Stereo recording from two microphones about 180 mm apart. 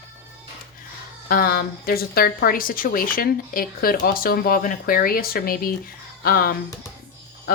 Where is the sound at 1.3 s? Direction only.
55° left (ahead or behind).